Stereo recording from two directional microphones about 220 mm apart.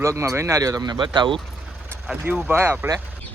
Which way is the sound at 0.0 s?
15° right (ahead or behind).